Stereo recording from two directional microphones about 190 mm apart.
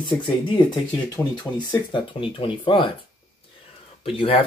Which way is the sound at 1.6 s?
25° left (ahead or behind).